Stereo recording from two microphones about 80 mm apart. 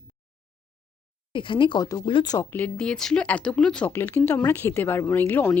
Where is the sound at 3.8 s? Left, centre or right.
Left.